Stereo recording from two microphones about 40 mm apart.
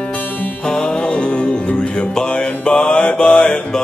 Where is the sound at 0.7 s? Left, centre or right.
Left.